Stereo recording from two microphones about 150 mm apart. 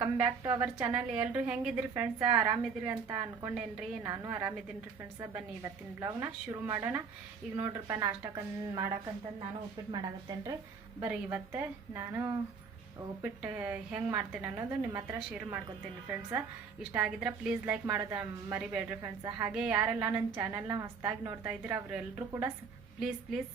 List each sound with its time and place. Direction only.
0.0 s a woman's voice: 15° right (ahead or behind)
4.0 s a woman's voice: 20° right (ahead or behind)
4.3 s a woman's voice: 10° right (ahead or behind)
9.9 s a woman's voice: 30° right (ahead or behind)
11.1 s a woman's voice: 10° right (ahead or behind)
16.9 s a woman's voice: 5° right (ahead or behind)
23.0 s a woman's voice: centre (ahead or behind)